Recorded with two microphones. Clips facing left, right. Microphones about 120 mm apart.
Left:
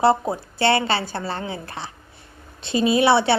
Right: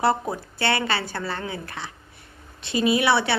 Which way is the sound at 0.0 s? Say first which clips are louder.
Left 4 dB; 25° left (ahead or behind).